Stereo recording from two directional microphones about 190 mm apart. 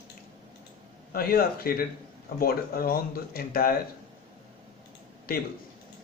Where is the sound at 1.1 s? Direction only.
50° left (ahead or behind).